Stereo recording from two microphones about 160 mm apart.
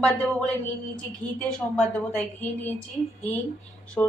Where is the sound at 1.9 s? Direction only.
10° left (ahead or behind).